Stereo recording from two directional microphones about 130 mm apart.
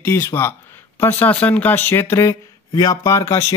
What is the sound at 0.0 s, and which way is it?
Speech, 20° left (ahead or behind).